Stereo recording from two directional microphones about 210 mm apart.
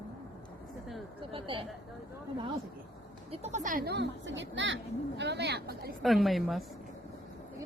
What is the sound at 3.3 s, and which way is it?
Speech, 30° right (ahead or behind).